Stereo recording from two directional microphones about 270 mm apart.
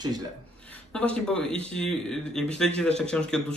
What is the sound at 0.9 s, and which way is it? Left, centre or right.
A man's voice, centre.